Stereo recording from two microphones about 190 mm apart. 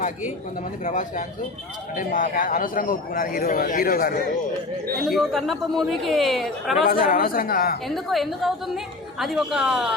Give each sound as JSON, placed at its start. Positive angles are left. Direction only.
{"t": 0.9, "sound": "a man's voice", "side_deg": 40}
{"t": 5.0, "sound": "a woman's voice", "side_deg": 0}
{"t": 6.8, "sound": "a man's voice", "side_deg": 50}
{"t": 7.9, "sound": "a woman's voice", "side_deg": 0}